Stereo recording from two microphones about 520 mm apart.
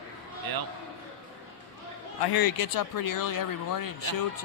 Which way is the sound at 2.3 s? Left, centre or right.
Left.